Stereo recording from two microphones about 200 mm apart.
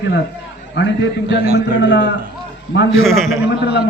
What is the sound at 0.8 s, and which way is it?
Speech, 60° left (ahead or behind).